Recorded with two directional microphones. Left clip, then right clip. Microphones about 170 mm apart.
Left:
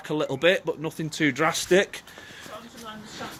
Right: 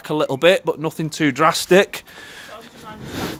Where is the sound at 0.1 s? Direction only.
35° right (ahead or behind).